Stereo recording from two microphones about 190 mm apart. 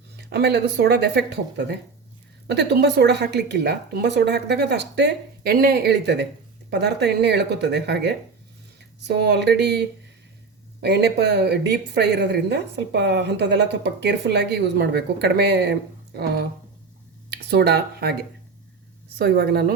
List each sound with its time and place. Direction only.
0.2 s speech: 60° right (ahead or behind)
19.2 s speech: 55° right (ahead or behind)